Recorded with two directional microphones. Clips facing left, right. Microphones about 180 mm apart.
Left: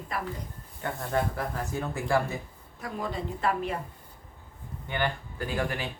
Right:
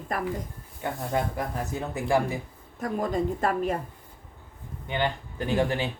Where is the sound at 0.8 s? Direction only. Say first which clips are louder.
Right 1 dB; 15° right (ahead or behind).